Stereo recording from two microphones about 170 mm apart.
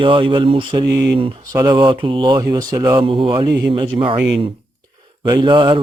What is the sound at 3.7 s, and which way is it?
Mantra, 30° right (ahead or behind).